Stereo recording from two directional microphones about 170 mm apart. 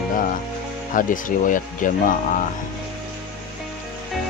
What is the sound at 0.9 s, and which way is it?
Speech, 50° left (ahead or behind).